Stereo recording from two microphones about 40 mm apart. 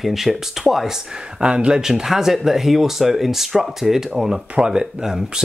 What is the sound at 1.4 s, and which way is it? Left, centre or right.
Speech, right.